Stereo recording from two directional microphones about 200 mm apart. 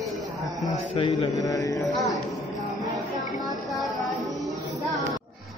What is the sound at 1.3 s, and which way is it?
Speech, 15° left (ahead or behind).